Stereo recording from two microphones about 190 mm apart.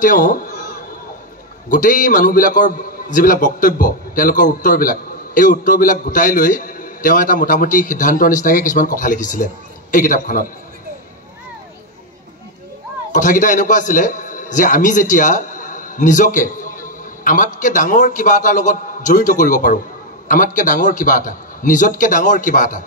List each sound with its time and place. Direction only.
0.0 s a sound: 45° left (ahead or behind)
1.7 s a man's voice: 45° left (ahead or behind)
13.1 s a man's voice: 40° left (ahead or behind)